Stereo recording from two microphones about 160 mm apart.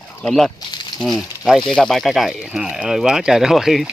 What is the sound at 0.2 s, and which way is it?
Speech, centre (ahead or behind).